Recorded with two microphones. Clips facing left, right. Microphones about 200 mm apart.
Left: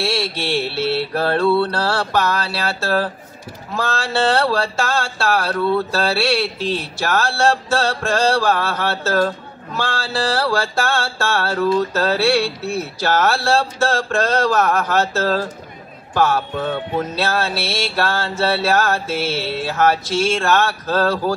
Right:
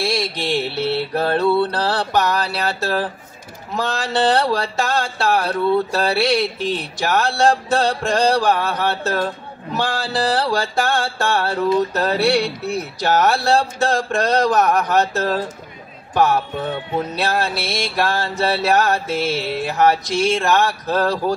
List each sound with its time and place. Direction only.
0.0 s mantra: 15° right (ahead or behind)
3.8 s music: 15° right (ahead or behind)